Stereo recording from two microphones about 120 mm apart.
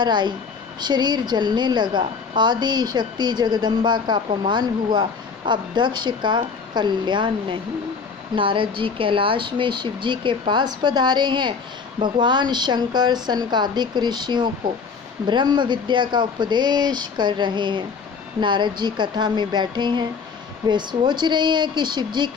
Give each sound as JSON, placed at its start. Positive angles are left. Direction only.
{"t": 0.0, "sound": "a woman's voice", "side_deg": -40}